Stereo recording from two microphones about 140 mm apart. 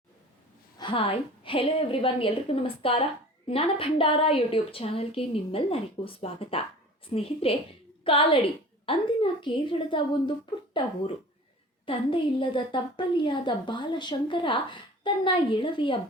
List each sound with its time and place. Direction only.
0.8 s a woman's voice: 40° left (ahead or behind)